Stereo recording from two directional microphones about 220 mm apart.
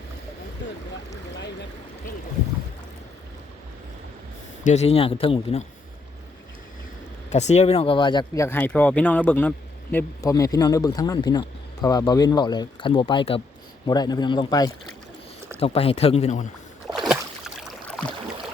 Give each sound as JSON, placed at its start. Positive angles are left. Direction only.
{"t": 4.6, "sound": "speech", "side_deg": 30}
{"t": 7.3, "sound": "speech", "side_deg": 30}
{"t": 16.9, "sound": "boat", "side_deg": 0}